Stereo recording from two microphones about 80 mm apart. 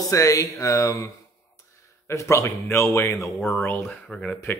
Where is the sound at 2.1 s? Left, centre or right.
Left.